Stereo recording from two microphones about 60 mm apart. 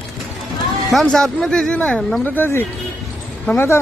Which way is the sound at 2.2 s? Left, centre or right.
Left.